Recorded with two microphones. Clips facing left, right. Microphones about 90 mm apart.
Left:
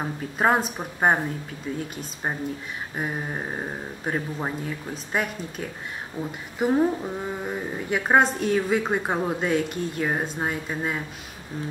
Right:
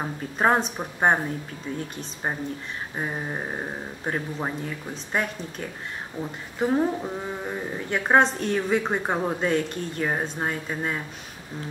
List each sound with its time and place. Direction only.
0.0 s a woman's voice: centre (ahead or behind)
3.0 s a woman's voice: centre (ahead or behind)